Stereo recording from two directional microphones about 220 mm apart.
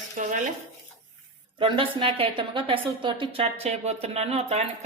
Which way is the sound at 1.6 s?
25° right (ahead or behind).